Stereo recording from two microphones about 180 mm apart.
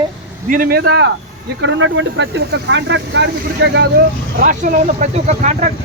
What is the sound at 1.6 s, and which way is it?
Speech, 90° right.